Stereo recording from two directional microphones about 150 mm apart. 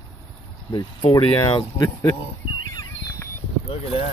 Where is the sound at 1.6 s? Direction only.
25° left (ahead or behind).